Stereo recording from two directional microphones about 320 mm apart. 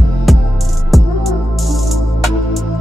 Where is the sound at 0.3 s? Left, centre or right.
Centre.